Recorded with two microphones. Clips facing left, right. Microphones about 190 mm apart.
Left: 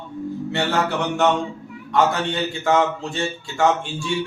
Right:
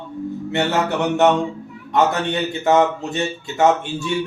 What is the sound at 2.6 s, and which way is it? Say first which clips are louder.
Speech: right 3 dB; 20° right (ahead or behind).